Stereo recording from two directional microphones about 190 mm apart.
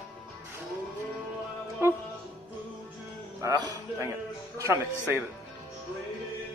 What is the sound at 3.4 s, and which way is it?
Speech, 15° right (ahead or behind).